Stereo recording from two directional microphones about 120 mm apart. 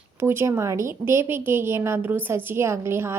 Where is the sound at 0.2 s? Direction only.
20° right (ahead or behind).